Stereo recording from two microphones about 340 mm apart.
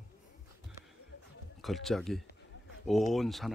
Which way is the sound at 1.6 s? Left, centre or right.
Centre.